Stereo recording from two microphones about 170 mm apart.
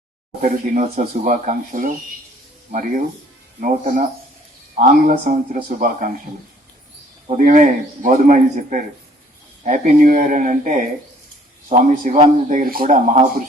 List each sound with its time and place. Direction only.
0.4 s speech: 45° right (ahead or behind)
3.6 s speech: 55° right (ahead or behind)
7.3 s speech: 50° right (ahead or behind)